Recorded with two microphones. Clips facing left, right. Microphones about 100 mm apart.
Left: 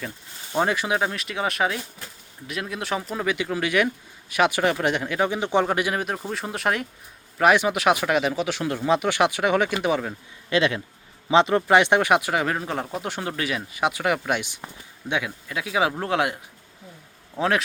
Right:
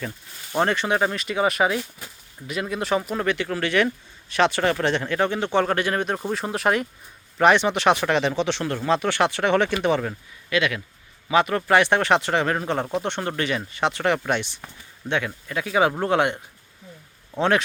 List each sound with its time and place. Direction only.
0.5 s speech: 5° left (ahead or behind)
3.2 s speech: 10° left (ahead or behind)
10.5 s speech: 30° left (ahead or behind); by 17.6 s centre (ahead or behind)